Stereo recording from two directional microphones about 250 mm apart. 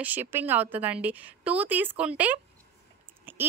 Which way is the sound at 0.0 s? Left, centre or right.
Centre.